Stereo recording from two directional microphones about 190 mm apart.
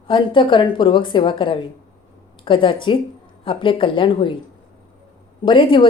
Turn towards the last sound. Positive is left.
turn(degrees=25)  # may be behind; listen again after turning